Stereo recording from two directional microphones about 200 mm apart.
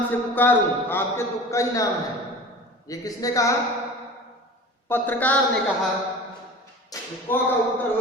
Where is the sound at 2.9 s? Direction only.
15° left (ahead or behind).